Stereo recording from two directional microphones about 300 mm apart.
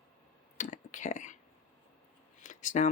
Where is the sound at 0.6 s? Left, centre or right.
Left.